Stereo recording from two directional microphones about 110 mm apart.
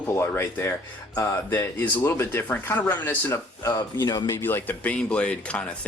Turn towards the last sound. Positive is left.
turn(degrees=10)  # may be behind; listen again after turning